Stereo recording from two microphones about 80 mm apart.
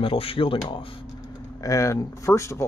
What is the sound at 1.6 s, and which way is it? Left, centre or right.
Speech, left.